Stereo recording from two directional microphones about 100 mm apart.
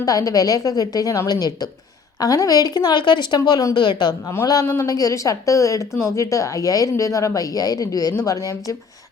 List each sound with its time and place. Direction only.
0.0 s a woman's voice: 35° left (ahead or behind)
4.6 s speech: 25° left (ahead or behind)
4.9 s a woman's voice: 35° left (ahead or behind)